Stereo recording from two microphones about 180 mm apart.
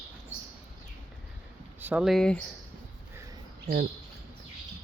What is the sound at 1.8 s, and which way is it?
Speech, 5° right (ahead or behind).